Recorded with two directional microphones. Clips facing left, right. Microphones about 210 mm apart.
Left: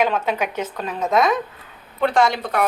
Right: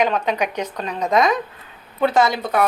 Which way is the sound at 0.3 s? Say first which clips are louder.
Right 1 dB; 5° left (ahead or behind).